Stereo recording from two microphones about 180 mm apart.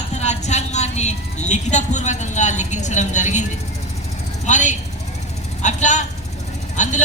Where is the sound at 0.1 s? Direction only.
40° left (ahead or behind).